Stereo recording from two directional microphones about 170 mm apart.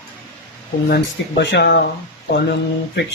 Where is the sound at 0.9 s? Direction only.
85° left.